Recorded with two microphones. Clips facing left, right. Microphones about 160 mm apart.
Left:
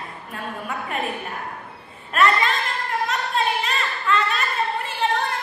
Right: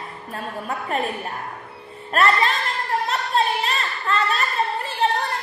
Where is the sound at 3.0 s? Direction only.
40° right (ahead or behind).